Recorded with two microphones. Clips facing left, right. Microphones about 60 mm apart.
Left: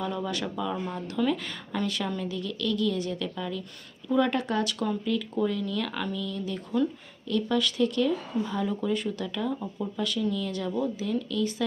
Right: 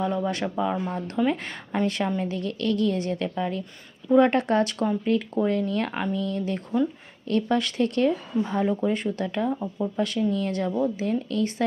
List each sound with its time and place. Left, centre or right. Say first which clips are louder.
0.0 s speech: right 5 dB; right
9.6 s speech: right 5 dB; centre
10.0 s speech: right 4 dB; right